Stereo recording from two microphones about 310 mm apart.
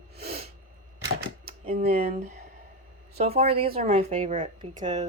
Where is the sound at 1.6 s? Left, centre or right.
Centre.